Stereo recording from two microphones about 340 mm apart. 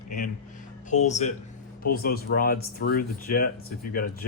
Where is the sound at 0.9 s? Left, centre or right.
Left.